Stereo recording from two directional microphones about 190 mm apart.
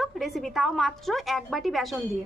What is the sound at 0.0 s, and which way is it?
A woman's voice, centre (ahead or behind).